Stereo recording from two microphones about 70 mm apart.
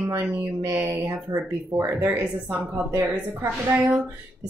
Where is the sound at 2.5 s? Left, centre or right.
Right.